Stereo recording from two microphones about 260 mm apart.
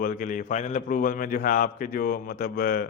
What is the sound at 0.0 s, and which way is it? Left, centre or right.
A man's voice, left.